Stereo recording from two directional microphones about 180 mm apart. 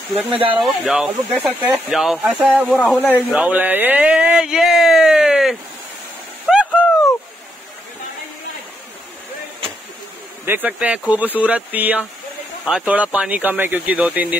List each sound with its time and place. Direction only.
0.3 s speech: 30° right (ahead or behind)
0.6 s speech: 5° right (ahead or behind)
3.3 s speech: 5° right (ahead or behind)
6.5 s a sound: 5° right (ahead or behind)
10.4 s speech: 10° right (ahead or behind)